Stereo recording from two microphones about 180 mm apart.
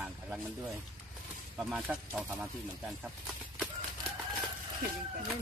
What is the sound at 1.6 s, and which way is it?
Speech, centre (ahead or behind).